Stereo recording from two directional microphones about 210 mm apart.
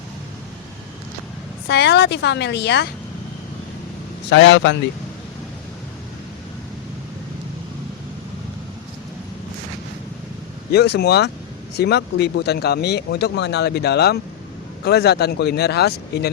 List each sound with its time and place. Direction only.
1.6 s speech: 55° left (ahead or behind)
4.3 s a man's voice: 55° left (ahead or behind)
10.7 s speech: 50° left (ahead or behind)